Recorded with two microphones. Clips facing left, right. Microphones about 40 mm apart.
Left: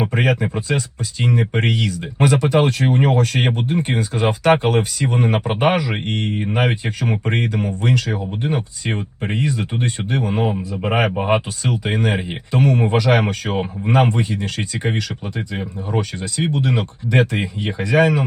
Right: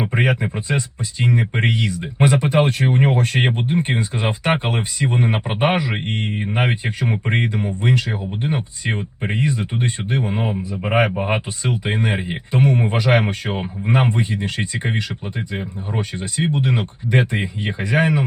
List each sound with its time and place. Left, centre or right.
0.0 s speech: right
11.2 s speech: centre
11.6 s speech: right
15.9 s speech: right